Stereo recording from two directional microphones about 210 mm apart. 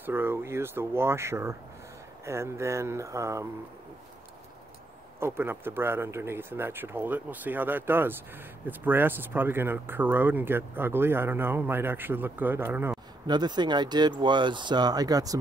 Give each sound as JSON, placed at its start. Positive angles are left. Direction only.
{"t": 0.0, "sound": "speech", "side_deg": -10}
{"t": 5.2, "sound": "speech", "side_deg": -10}